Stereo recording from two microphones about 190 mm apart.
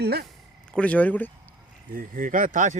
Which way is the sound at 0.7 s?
5° left (ahead or behind).